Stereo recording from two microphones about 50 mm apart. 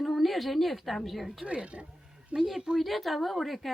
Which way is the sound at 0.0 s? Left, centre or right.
Centre.